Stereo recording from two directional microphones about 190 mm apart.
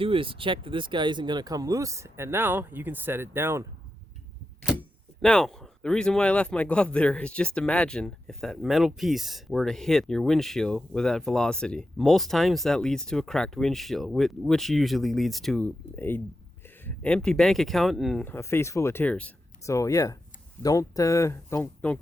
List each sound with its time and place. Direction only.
0.0 s speech: 30° right (ahead or behind)
5.2 s speech: 5° left (ahead or behind)